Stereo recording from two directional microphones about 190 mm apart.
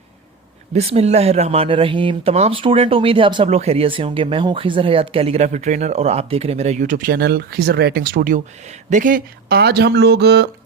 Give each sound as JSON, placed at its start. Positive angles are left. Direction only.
{"t": 0.7, "sound": "speech", "side_deg": -35}